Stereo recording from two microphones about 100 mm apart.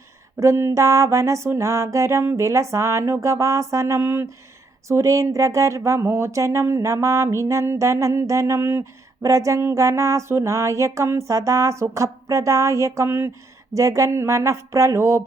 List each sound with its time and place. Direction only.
0.3 s music: 30° right (ahead or behind)
4.9 s speech: 30° right (ahead or behind)
13.7 s music: 30° right (ahead or behind)